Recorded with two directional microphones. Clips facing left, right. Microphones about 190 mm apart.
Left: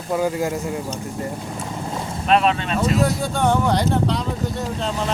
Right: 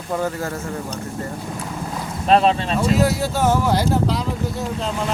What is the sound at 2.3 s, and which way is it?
Speech, 35° right (ahead or behind).